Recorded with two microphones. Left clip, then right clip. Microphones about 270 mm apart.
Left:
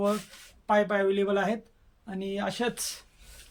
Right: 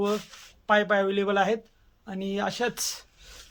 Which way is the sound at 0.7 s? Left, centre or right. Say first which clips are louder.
Right 2 dB; centre.